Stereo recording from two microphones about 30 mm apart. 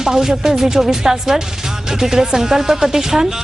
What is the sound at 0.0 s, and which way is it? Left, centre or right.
Speech, centre.